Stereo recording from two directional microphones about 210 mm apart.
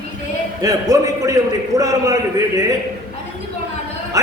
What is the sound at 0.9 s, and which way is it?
A man's voice, 15° right (ahead or behind).